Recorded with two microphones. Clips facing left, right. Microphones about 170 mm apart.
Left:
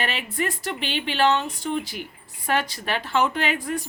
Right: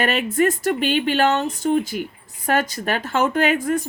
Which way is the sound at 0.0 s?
45° right (ahead or behind).